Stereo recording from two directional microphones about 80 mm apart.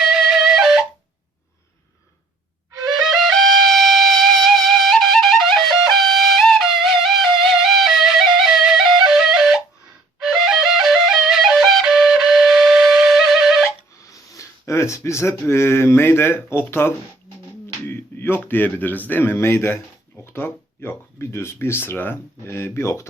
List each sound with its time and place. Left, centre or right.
0.0 s music: centre
2.9 s music: centre
10.2 s flute: centre
14.0 s a sound: left
14.7 s speech: left